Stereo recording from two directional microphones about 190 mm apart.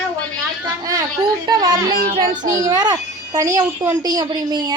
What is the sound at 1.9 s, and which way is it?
Child singing, 50° right (ahead or behind).